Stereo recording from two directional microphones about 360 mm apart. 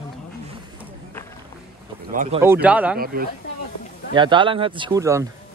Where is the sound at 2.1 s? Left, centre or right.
Right.